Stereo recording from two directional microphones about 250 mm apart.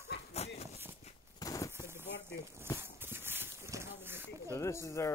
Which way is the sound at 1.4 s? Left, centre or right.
Centre.